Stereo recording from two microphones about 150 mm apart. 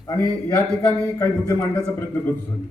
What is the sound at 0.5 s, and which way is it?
A man's voice, 10° left (ahead or behind).